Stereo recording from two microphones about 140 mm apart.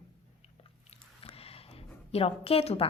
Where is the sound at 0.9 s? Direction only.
45° left (ahead or behind).